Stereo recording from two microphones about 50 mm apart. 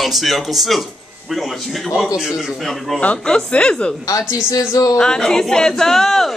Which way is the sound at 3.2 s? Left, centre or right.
Centre.